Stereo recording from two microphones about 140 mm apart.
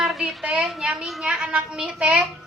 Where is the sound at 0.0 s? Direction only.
Centre (ahead or behind).